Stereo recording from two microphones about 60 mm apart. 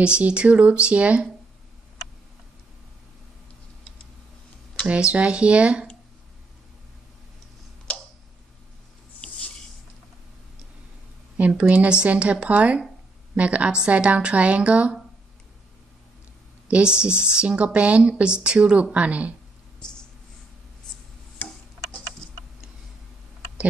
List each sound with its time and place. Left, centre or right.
0.0 s a woman's voice: centre
4.8 s a woman's voice: centre
11.3 s a woman's voice: right
16.6 s a woman's voice: centre
19.8 s a sound: centre
22.2 s tick: centre